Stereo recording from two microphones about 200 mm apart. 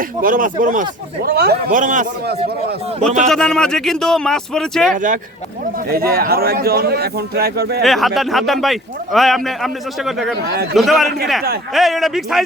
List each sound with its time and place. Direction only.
0.2 s a man's voice: 45° right (ahead or behind)
3.2 s a man's voice: 5° left (ahead or behind)
4.9 s a man's voice: 40° right (ahead or behind)
7.9 s a man's voice: centre (ahead or behind)